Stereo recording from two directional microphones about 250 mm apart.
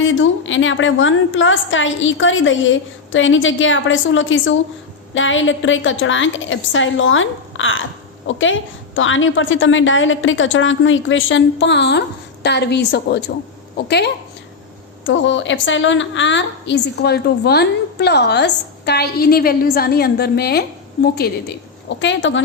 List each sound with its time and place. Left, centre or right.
0.0 s a woman's voice: left